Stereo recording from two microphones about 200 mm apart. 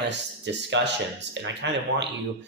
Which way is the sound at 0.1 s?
60° right (ahead or behind).